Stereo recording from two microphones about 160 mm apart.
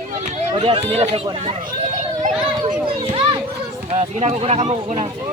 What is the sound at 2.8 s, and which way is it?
A child's voice, 30° right (ahead or behind).